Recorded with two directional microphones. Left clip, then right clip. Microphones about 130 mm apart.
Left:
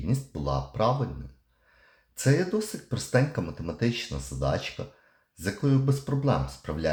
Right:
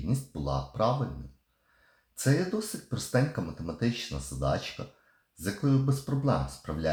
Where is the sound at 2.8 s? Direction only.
30° left (ahead or behind).